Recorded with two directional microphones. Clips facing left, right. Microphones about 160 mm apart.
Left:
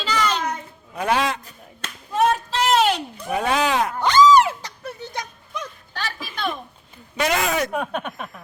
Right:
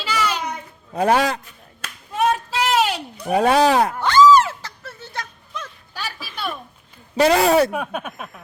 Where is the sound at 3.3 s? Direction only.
35° right (ahead or behind).